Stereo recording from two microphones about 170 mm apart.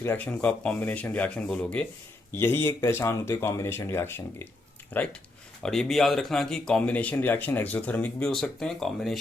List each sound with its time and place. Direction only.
0.0 s speech: 10° left (ahead or behind)